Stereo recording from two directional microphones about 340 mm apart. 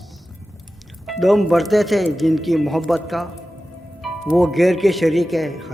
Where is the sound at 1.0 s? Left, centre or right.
Centre.